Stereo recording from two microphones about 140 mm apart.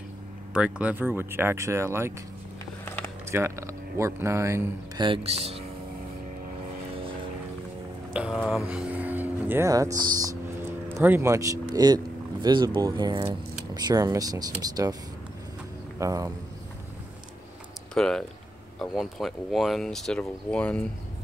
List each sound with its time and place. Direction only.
0.5 s speech: 10° right (ahead or behind)
3.3 s speech: 20° right (ahead or behind)
5.0 s speech: 40° right (ahead or behind)
8.1 s speech: 5° right (ahead or behind)
8.6 s music: 10° right (ahead or behind)
9.7 s speech: 25° right (ahead or behind)
10.6 s speech: 15° right (ahead or behind)
16.0 s speech: 25° right (ahead or behind)
17.9 s speech: 5° left (ahead or behind)